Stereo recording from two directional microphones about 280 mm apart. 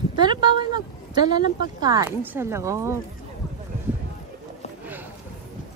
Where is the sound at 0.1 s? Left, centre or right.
Centre.